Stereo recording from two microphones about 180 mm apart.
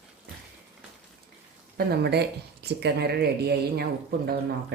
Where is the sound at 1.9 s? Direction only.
65° right (ahead or behind).